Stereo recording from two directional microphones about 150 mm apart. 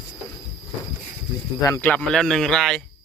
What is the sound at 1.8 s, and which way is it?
Speech, 10° left (ahead or behind).